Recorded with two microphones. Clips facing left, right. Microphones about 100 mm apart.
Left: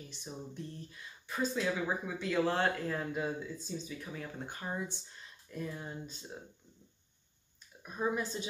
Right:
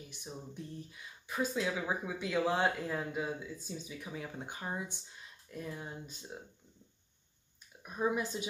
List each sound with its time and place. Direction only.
0.1 s speech: 10° right (ahead or behind)
7.8 s speech: 10° right (ahead or behind)